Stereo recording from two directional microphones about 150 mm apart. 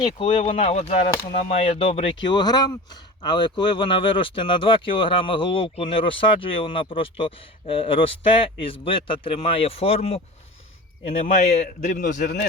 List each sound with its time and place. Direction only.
0.0 s speech: 35° left (ahead or behind)
11.2 s a man's voice: 50° left (ahead or behind); by 12.5 s 75° left (ahead or behind)